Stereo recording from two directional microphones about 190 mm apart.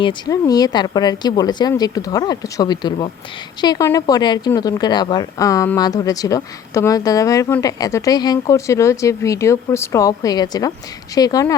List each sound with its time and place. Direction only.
0.0 s speech: 20° left (ahead or behind)